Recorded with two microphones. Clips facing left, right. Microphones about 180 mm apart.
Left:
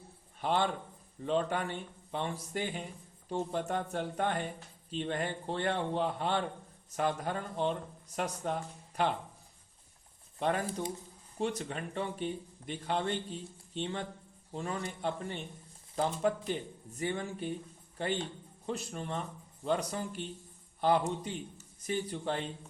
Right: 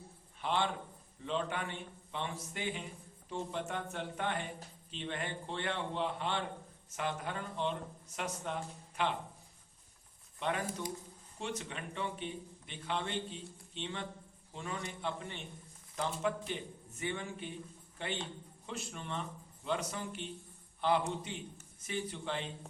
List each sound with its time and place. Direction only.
0.4 s a man's voice: 40° left (ahead or behind)
10.4 s a man's voice: 40° left (ahead or behind)